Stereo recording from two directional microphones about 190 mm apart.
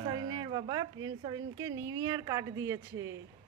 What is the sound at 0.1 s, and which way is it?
Speech, 20° right (ahead or behind).